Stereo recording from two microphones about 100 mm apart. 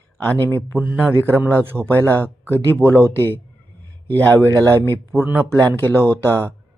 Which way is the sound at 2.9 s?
25° right (ahead or behind).